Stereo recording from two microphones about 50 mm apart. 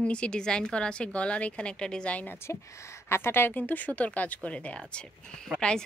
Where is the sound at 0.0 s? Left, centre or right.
Left.